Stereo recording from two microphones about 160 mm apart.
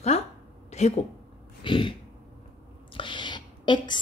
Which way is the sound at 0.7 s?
40° left (ahead or behind).